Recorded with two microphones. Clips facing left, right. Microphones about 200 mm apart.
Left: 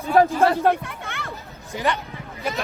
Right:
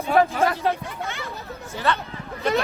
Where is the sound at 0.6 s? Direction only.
55° left (ahead or behind).